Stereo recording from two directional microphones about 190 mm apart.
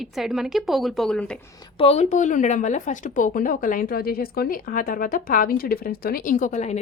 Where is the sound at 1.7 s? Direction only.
35° left (ahead or behind).